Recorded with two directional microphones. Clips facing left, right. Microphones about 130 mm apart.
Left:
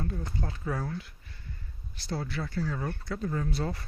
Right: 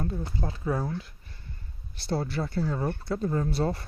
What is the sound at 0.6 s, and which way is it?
Speech, 15° right (ahead or behind).